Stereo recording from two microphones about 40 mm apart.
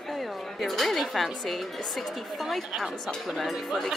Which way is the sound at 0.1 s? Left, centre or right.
Centre.